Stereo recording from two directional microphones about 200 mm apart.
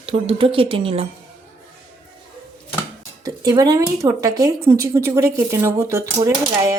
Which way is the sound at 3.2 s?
20° right (ahead or behind).